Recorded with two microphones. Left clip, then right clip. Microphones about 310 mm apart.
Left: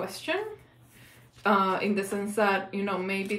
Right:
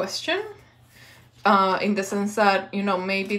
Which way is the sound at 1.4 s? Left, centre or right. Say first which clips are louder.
Right 5 dB; centre.